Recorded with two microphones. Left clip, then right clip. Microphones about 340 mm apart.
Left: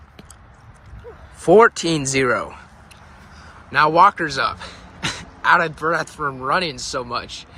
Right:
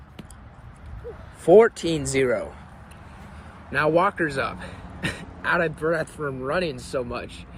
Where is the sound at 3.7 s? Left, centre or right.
Centre.